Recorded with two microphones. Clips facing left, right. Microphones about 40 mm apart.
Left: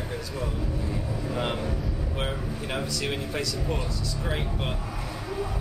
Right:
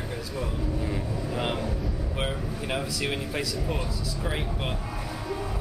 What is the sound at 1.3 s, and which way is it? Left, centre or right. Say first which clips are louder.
Speech: even; centre.